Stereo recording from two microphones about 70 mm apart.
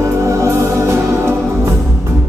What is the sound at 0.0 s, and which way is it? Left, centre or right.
Music, right.